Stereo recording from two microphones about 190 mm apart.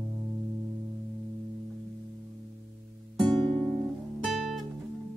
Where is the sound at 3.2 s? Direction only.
25° right (ahead or behind).